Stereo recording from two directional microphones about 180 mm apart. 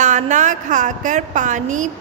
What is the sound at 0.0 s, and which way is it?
Music, 45° right (ahead or behind).